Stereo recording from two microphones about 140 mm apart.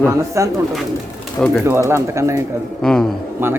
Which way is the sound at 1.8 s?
20° right (ahead or behind).